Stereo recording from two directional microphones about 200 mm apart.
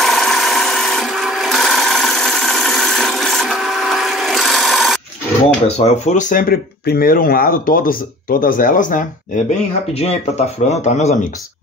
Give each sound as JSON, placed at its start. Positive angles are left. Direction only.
{"t": 0.0, "sound": "tools", "side_deg": 0}
{"t": 5.8, "sound": "speech", "side_deg": 35}